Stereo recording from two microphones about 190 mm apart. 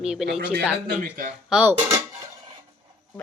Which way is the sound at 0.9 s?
50° right (ahead or behind).